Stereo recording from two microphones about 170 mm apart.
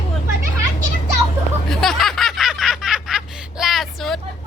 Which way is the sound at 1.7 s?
Centre (ahead or behind).